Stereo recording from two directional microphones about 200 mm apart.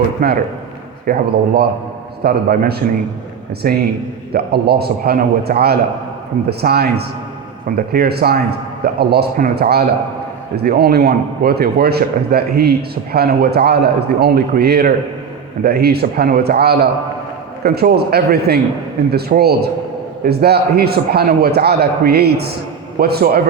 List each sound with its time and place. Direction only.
0.2 s a man's voice: 45° right (ahead or behind)